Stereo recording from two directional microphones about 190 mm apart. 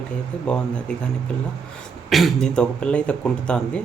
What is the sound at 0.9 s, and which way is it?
Speech, 5° left (ahead or behind).